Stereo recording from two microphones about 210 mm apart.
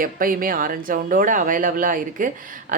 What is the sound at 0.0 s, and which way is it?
Speech, 40° right (ahead or behind).